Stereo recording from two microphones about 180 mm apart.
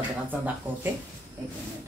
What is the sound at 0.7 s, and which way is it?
Speech, 10° right (ahead or behind).